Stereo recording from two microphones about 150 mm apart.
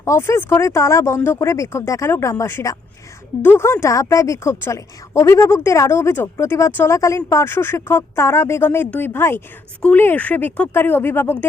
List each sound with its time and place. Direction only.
0.0 s speech: 20° left (ahead or behind)